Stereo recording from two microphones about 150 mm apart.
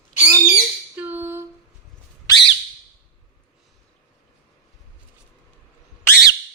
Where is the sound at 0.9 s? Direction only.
10° right (ahead or behind).